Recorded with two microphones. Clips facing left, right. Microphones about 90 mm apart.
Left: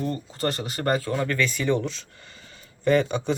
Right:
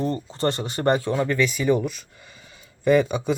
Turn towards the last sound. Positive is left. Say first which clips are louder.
# right 2 dB
turn(degrees=-10)  # may be behind; listen again after turning